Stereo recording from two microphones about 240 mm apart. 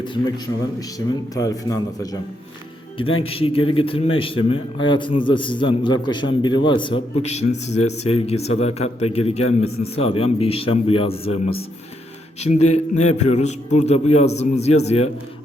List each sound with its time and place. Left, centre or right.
0.0 s a man's voice: centre
3.2 s a man's voice: left